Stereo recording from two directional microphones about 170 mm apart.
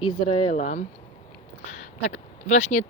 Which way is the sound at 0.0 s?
35° left (ahead or behind).